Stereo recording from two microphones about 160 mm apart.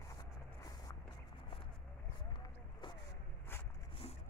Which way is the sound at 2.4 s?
30° left (ahead or behind).